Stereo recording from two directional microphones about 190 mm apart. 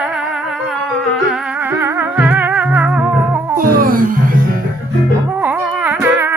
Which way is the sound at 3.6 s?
50° right (ahead or behind).